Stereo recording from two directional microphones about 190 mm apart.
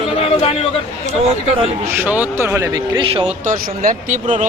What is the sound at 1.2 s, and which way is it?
Speech, 30° right (ahead or behind).